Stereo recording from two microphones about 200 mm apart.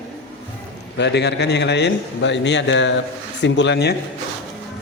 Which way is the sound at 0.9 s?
60° left (ahead or behind).